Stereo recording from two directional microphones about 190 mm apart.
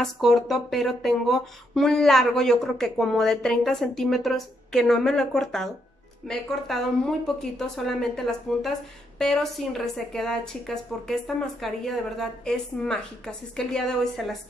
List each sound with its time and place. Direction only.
0.0 s speech: centre (ahead or behind)